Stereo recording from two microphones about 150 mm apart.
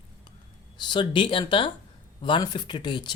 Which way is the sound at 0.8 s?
30° left (ahead or behind).